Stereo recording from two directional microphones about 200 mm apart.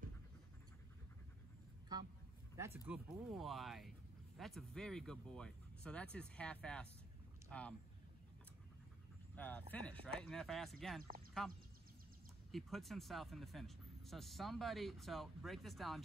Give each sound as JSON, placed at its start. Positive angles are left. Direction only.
{"t": 1.9, "sound": "speech", "side_deg": -20}
{"t": 9.3, "sound": "speech", "side_deg": 10}
{"t": 12.4, "sound": "speech", "side_deg": 0}